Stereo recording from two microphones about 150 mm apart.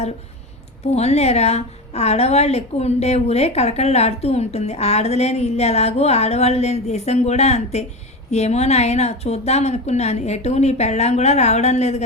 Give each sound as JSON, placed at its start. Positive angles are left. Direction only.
{"t": 0.9, "sound": "a woman's voice", "side_deg": 45}